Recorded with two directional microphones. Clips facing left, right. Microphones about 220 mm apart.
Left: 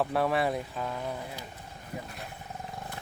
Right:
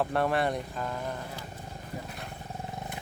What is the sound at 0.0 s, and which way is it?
Speech, centre (ahead or behind).